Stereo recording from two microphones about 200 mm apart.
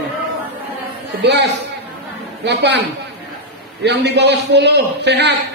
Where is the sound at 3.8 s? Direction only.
60° right (ahead or behind).